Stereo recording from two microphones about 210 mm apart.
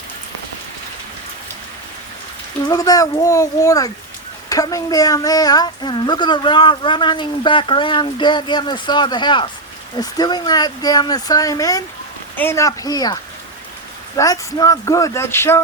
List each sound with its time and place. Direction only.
2.6 s speech: 15° left (ahead or behind)
14.2 s speech: 15° left (ahead or behind)